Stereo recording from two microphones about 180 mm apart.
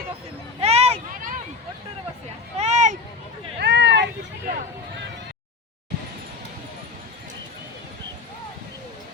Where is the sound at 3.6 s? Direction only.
70° right (ahead or behind).